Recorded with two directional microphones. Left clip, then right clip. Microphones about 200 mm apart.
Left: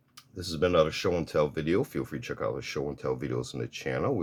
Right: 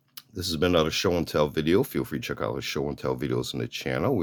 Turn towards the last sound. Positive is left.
turn(degrees=-40)  # may be behind; listen again after turning